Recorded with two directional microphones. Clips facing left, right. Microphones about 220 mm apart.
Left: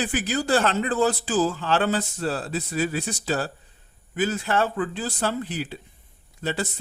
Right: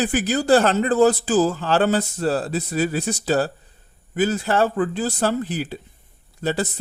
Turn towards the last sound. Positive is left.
turn(degrees=-40)  # may be behind; listen again after turning